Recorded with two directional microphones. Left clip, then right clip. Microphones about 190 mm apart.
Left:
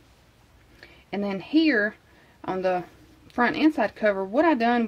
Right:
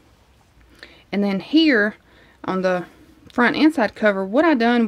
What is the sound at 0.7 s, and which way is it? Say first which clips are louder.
Speech: right 6 dB; 40° right (ahead or behind).